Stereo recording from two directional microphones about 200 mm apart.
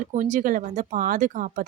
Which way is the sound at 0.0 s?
40° right (ahead or behind).